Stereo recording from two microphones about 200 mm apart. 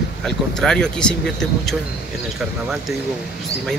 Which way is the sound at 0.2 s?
5° left (ahead or behind).